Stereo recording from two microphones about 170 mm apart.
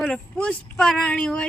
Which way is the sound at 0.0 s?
5° left (ahead or behind).